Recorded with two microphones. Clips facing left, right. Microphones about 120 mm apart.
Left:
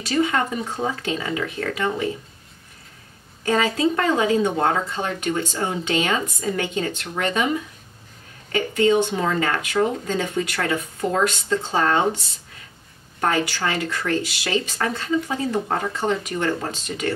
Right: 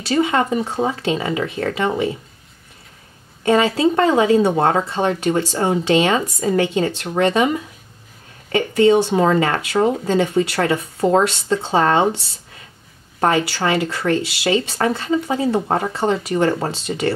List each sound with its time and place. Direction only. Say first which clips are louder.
0.0 s speech: right 4 dB; 30° right (ahead or behind)
3.4 s speech: right 5 dB; 25° right (ahead or behind)
8.5 s speech: right 5 dB; 35° right (ahead or behind)